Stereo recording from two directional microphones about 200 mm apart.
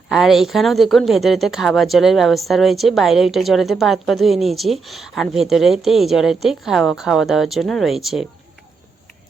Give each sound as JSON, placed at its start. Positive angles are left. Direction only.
{"t": 0.1, "sound": "a woman's voice", "side_deg": 0}